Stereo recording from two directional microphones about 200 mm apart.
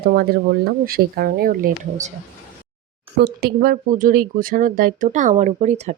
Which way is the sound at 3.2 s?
50° right (ahead or behind).